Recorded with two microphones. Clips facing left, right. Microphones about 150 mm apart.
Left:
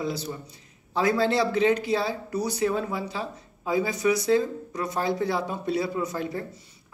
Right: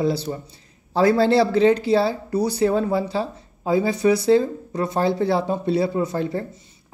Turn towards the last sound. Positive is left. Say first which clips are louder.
# right 6 dB
turn(degrees=-30)  # may be behind; listen again after turning